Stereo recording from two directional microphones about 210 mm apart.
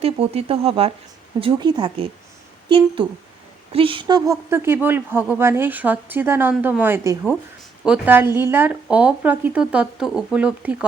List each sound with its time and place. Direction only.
0.0 s a woman's voice: 30° right (ahead or behind); by 10.8 s 5° right (ahead or behind)